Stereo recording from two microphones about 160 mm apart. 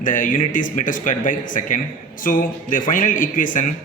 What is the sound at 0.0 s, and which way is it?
A man's voice, 55° left (ahead or behind).